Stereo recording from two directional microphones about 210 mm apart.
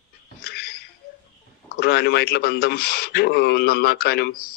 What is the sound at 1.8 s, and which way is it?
Speech, 50° left (ahead or behind).